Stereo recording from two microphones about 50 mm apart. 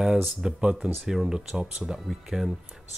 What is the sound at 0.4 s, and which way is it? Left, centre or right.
Speech, centre.